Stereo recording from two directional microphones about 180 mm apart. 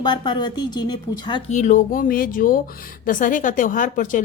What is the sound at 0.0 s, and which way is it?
A woman's voice, 25° left (ahead or behind).